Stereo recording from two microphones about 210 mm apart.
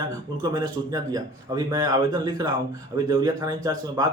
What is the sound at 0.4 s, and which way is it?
A man's voice, 15° right (ahead or behind).